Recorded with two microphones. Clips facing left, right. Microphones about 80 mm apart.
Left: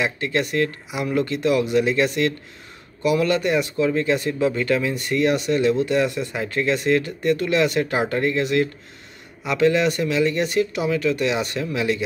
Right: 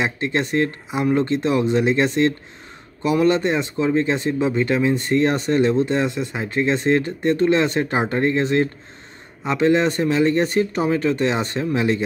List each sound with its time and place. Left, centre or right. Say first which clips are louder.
0.0 s speech: right 1 dB; right